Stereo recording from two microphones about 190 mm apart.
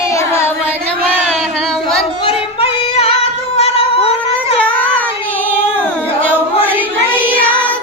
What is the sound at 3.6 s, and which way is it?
Cat, 30° left (ahead or behind).